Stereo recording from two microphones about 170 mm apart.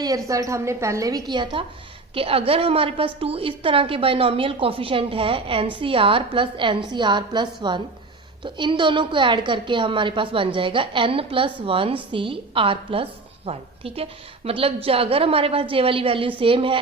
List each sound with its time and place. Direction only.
0.3 s a woman's voice: 20° right (ahead or behind)